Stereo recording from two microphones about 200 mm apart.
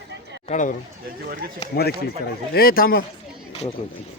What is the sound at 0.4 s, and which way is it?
A man's voice, 40° left (ahead or behind).